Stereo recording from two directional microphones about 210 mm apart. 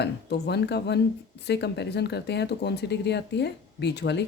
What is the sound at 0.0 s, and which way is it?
A woman's voice, 50° left (ahead or behind).